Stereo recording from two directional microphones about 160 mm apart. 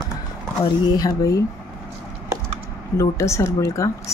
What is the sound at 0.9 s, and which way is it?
Speech, 20° left (ahead or behind).